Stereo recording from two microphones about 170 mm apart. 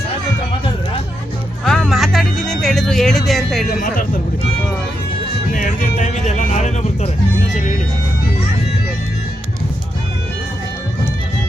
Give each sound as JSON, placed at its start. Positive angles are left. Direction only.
{"t": 1.6, "sound": "music", "side_deg": 0}
{"t": 3.8, "sound": "speech", "side_deg": 55}
{"t": 5.5, "sound": "music", "side_deg": 50}